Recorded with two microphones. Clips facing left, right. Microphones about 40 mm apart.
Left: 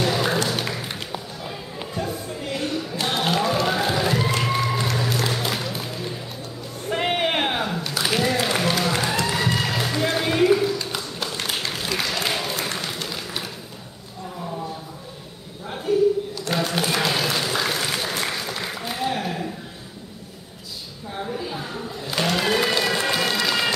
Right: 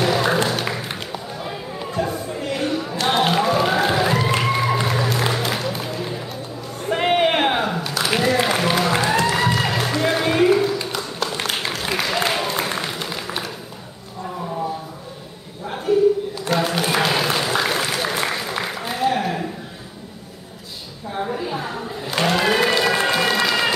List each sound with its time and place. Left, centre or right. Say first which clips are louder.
0.0 s a sound: right 3 dB; centre
0.5 s music: right 3 dB; centre
1.4 s a sound: right 4 dB; centre
4.6 s applause: right 3 dB; centre
5.4 s music: right 3 dB; centre
6.9 s a sound: right 5 dB; centre
8.1 s applause: right 4 dB; centre
9.2 s a sound: right 4 dB; centre
11.8 s applause: right 5 dB; centre
16.4 s applause: right 4 dB; centre
21.1 s applause: right 5 dB; right
23.1 s emergency vehicle: right 4 dB; centre